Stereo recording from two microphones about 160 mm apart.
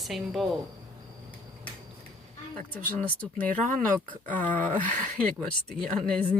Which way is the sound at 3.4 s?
60° right (ahead or behind).